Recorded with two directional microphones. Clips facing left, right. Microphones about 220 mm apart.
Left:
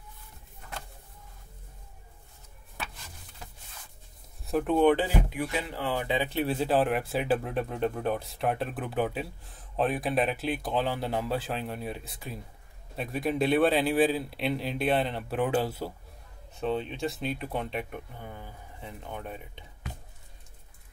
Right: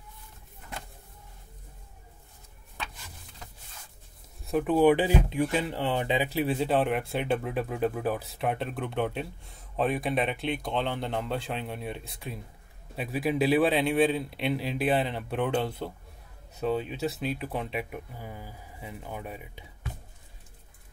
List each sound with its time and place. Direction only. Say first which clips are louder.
4.5 s speech: right 1 dB; centre (ahead or behind)
5.3 s speech: right 5 dB; 30° right (ahead or behind)
6.3 s speech: left 1 dB; centre (ahead or behind)
16.5 s speech: right 1 dB; 5° right (ahead or behind)